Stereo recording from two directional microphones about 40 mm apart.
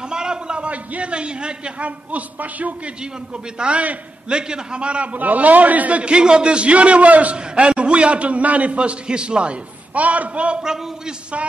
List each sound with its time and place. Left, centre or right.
0.1 s a sound: centre
0.7 s a man's voice: right
6.1 s a man's voice: right